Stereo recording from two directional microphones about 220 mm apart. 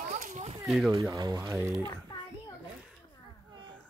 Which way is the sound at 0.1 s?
30° right (ahead or behind).